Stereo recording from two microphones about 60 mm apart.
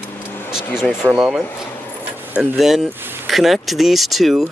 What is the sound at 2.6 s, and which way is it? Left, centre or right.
Speech, centre.